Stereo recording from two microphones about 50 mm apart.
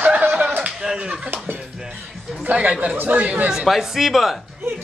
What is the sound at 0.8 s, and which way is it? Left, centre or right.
Speech, centre.